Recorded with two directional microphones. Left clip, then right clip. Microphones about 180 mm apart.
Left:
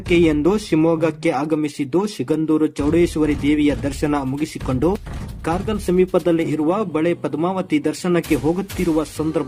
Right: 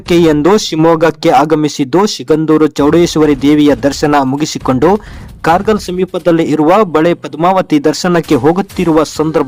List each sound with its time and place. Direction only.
0.1 s speech: 50° right (ahead or behind)